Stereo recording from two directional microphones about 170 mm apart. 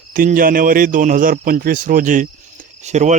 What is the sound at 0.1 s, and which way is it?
Speech, 55° right (ahead or behind).